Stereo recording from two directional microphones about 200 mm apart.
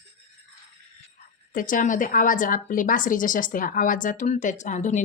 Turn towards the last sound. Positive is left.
turn(degrees=35)  # may be behind; listen again after turning